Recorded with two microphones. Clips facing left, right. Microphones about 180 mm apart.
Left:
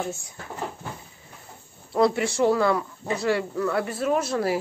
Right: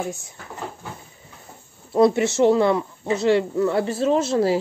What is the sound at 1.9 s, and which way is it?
Speech, 20° right (ahead or behind).